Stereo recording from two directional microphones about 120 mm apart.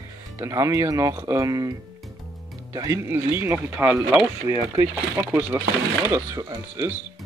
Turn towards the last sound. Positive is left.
turn(degrees=-30)  # may be behind; listen again after turning